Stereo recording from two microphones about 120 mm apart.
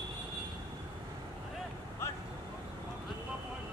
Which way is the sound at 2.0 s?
20° left (ahead or behind).